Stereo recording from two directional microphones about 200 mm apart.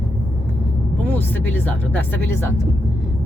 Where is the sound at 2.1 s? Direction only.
10° left (ahead or behind).